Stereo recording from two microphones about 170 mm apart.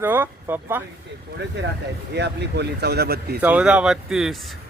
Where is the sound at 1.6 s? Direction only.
90° right; by 3.4 s 70° right (ahead or behind).